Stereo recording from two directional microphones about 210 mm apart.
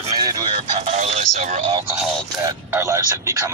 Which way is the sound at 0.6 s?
30° right (ahead or behind).